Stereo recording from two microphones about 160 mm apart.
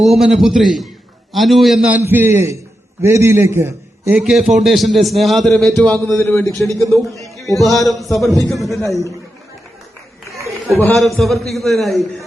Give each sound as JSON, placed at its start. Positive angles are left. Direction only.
{"t": 0.0, "sound": "a man's voice", "side_deg": 0}
{"t": 4.2, "sound": "a man's voice", "side_deg": 0}
{"t": 10.8, "sound": "a man's voice", "side_deg": 5}